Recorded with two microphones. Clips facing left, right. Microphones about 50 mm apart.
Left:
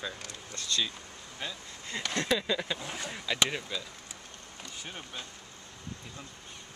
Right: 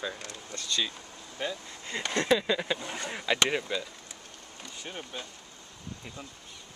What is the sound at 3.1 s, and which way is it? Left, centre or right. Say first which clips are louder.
Speech: right 4 dB; right.